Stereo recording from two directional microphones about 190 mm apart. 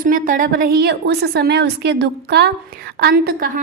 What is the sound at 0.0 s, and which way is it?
A woman's voice, 45° right (ahead or behind).